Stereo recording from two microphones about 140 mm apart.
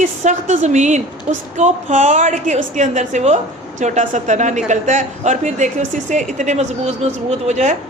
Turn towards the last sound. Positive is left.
turn(degrees=-55)  # may be behind; listen again after turning